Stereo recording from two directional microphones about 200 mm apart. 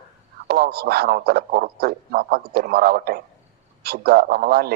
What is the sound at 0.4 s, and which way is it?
A man's voice, 50° right (ahead or behind).